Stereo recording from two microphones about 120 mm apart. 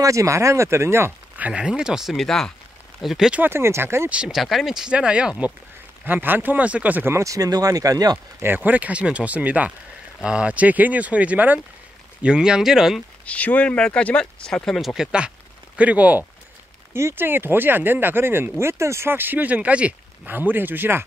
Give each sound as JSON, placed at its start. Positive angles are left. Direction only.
{"t": 0.0, "sound": "speech", "side_deg": -25}
{"t": 1.5, "sound": "speech", "side_deg": -5}
{"t": 3.4, "sound": "speech", "side_deg": -20}
{"t": 4.1, "sound": "speech", "side_deg": -5}
{"t": 8.4, "sound": "speech", "side_deg": -15}
{"t": 13.2, "sound": "speech", "side_deg": 10}
{"t": 15.0, "sound": "speech", "side_deg": -10}